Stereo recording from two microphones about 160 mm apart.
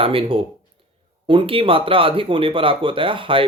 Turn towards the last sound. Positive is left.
turn(degrees=-35)  # may be behind; listen again after turning